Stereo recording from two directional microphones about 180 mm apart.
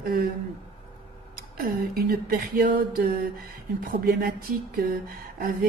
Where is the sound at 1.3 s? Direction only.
55° right (ahead or behind).